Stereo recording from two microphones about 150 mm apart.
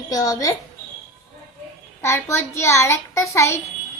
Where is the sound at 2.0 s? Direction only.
20° left (ahead or behind).